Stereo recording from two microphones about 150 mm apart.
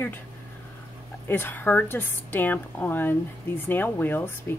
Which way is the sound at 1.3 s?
15° left (ahead or behind).